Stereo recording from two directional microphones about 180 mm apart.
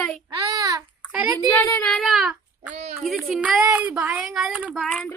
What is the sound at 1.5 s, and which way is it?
Speech, 15° left (ahead or behind).